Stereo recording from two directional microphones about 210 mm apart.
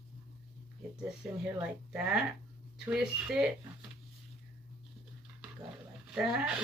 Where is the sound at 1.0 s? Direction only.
5° right (ahead or behind).